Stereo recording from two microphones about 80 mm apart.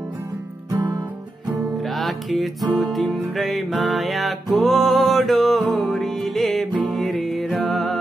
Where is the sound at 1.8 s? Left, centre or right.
Centre.